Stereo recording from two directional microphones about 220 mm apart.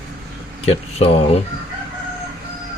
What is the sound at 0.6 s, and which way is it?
Speech, 25° left (ahead or behind).